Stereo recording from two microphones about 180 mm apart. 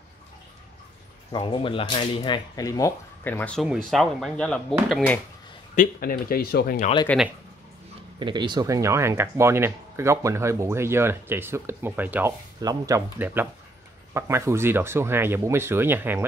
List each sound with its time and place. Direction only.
1.3 s speech: 30° left (ahead or behind); by 4.7 s 5° left (ahead or behind)
5.8 s speech: 50° left (ahead or behind)
7.1 s speech: 5° left (ahead or behind)
8.2 s speech: 25° right (ahead or behind)